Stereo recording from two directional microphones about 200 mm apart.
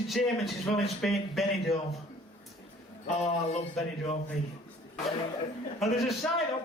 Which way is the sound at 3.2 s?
30° left (ahead or behind).